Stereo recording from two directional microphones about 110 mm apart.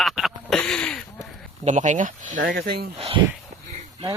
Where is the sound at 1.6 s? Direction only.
90° right.